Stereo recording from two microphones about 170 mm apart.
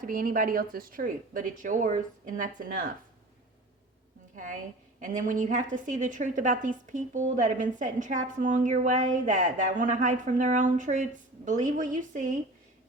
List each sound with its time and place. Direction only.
0.0 s a woman's voice: 55° right (ahead or behind)
4.4 s a woman's voice: 50° right (ahead or behind)